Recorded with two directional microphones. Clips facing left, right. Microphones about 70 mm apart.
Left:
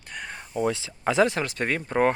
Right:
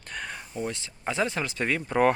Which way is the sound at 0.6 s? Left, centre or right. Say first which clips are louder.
Left 8 dB; left.